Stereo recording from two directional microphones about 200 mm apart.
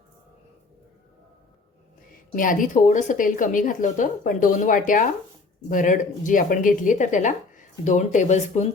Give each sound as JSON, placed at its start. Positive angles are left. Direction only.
{"t": 2.3, "sound": "speech", "side_deg": 40}